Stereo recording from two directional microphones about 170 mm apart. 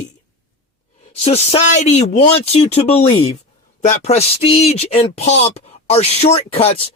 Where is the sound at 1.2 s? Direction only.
35° left (ahead or behind).